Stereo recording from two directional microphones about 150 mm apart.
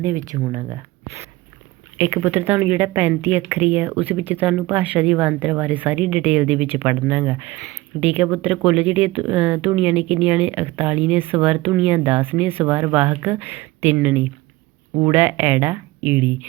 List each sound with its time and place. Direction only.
0.0 s speech: 20° right (ahead or behind)